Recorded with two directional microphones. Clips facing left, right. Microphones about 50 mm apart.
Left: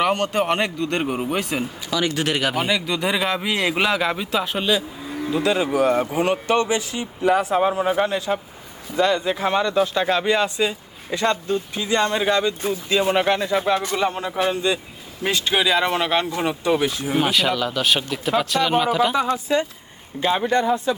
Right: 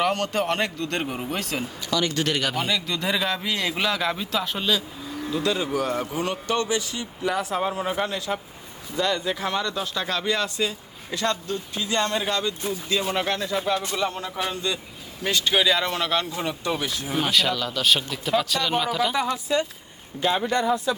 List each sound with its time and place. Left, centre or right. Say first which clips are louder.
0.0 s a man's voice: left 3 dB; left
17.2 s a man's voice: left 3 dB; centre
19.1 s speech: left 3 dB; left